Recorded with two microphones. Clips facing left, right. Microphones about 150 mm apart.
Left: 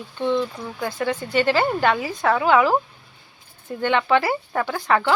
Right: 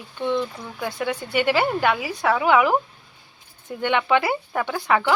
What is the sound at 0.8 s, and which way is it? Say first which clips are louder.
Speech: left 2 dB; 15° right (ahead or behind).